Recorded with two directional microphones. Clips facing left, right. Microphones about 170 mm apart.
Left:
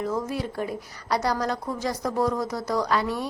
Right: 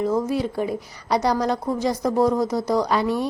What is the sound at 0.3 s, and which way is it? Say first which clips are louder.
A woman's voice: right 5 dB; 10° right (ahead or behind).